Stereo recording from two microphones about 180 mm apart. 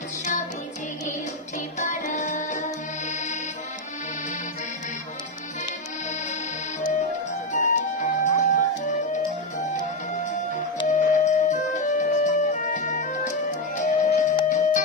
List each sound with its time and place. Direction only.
1.8 s music: 45° left (ahead or behind)
7.5 s music: 45° left (ahead or behind)
10.9 s music: 40° left (ahead or behind)